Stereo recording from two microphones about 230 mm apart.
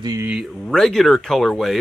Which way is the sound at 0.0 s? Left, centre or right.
Centre.